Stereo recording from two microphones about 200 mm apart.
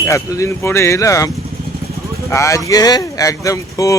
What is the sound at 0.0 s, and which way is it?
Speech, 15° left (ahead or behind).